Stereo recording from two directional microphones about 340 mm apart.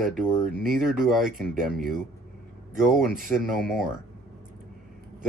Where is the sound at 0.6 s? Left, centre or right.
Centre.